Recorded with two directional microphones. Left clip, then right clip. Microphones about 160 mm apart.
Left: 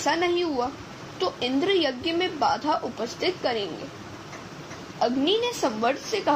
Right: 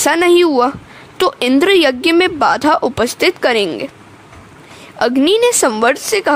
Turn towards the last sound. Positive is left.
turn(degrees=-65)  # may be behind; listen again after turning